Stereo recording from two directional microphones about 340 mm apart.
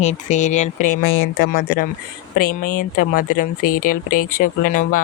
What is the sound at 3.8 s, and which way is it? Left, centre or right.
Speech, left.